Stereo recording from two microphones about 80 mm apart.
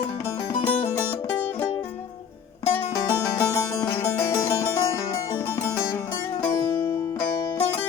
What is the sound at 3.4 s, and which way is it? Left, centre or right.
Music, left.